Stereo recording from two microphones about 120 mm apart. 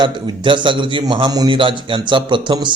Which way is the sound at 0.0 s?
40° right (ahead or behind).